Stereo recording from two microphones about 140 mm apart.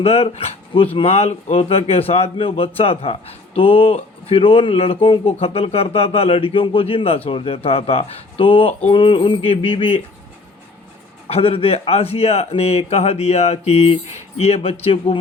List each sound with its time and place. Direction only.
0.0 s a man's voice: 45° left (ahead or behind)
11.3 s a man's voice: 40° left (ahead or behind)